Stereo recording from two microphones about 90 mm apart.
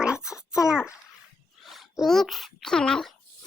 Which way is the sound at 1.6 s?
Centre (ahead or behind).